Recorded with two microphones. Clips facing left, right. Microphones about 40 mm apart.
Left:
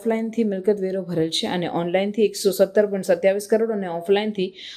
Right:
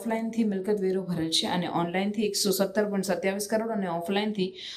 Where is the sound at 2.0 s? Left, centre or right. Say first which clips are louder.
Left 7 dB; left.